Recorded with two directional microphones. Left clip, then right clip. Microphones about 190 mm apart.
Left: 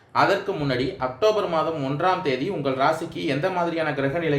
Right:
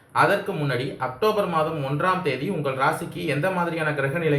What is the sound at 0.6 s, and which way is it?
Speech, 45° left (ahead or behind).